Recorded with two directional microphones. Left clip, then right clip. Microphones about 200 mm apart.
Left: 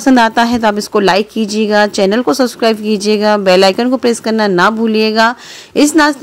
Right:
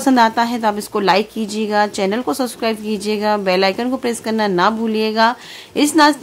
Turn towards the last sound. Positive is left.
turn(degrees=25)  # may be behind; listen again after turning